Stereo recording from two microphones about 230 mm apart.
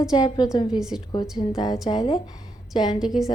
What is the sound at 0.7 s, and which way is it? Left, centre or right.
Speech, centre.